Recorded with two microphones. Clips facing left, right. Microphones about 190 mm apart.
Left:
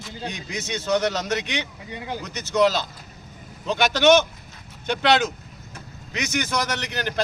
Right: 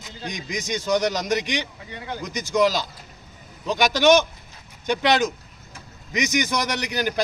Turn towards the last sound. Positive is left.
turn(degrees=-10)  # may be behind; listen again after turning